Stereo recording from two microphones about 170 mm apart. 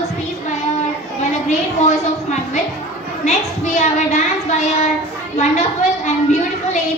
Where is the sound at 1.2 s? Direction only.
40° left (ahead or behind).